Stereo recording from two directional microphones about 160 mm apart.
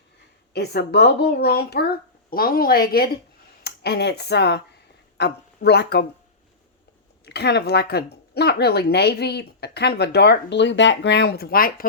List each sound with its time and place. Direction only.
0.5 s speech: 90° left; by 2.8 s 65° left (ahead or behind)
3.6 s speech: 90° left
7.3 s speech: 90° left; by 11.9 s 65° left (ahead or behind)